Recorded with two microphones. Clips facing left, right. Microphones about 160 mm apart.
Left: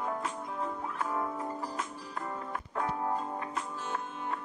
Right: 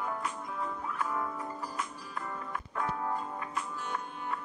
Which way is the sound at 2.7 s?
25° left (ahead or behind).